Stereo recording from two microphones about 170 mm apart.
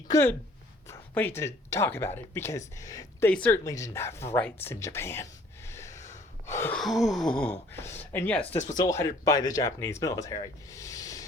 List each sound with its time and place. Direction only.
0.1 s speech: 15° left (ahead or behind)
0.9 s a sound: 10° left (ahead or behind)
1.4 s speech: 15° left (ahead or behind)
5.6 s gasp: 15° left (ahead or behind)
6.7 s gasp: centre (ahead or behind)
7.7 s speech: 15° left (ahead or behind)